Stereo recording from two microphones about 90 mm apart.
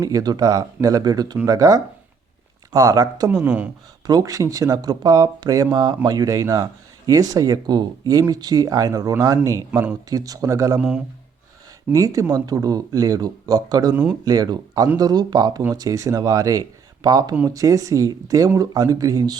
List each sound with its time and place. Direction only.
0.0 s speech: 45° right (ahead or behind)
3.3 s speech: 15° right (ahead or behind)
4.0 s speech: 45° right (ahead or behind)
10.8 s speech: 10° right (ahead or behind)
11.9 s speech: 40° right (ahead or behind)